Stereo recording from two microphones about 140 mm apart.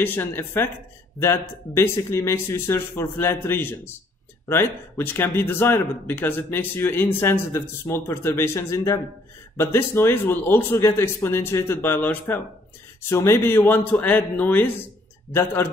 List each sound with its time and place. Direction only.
0.0 s speech: 15° left (ahead or behind)